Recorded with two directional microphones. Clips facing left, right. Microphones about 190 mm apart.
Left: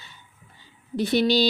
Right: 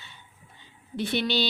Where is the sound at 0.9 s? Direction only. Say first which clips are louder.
Left 6 dB; 40° left (ahead or behind).